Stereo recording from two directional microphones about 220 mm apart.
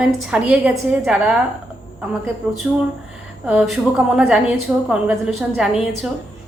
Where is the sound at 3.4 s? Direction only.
Centre (ahead or behind).